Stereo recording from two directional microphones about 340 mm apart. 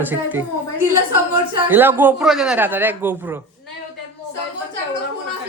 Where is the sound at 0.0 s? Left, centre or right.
Centre.